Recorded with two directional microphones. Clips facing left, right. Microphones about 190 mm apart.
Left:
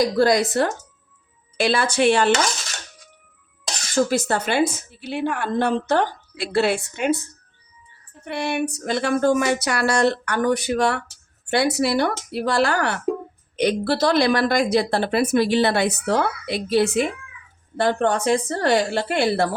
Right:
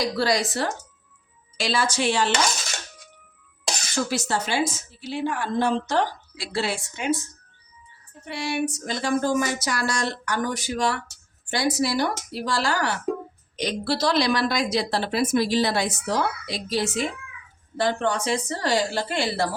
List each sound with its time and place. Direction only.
0.0 s a woman's voice: 50° left (ahead or behind)
3.9 s a woman's voice: 55° left (ahead or behind)
8.2 s a woman's voice: 60° left (ahead or behind)